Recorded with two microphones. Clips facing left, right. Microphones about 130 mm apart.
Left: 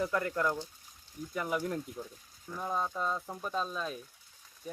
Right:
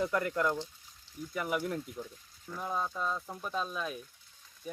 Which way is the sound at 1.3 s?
10° right (ahead or behind).